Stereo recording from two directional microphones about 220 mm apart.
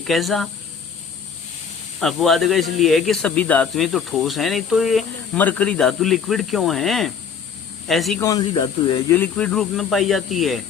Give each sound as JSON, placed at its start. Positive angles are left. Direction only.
{"t": 0.0, "sound": "speech", "side_deg": 0}
{"t": 2.0, "sound": "speech", "side_deg": 0}
{"t": 8.2, "sound": "speech", "side_deg": 15}
{"t": 9.1, "sound": "speech", "side_deg": 5}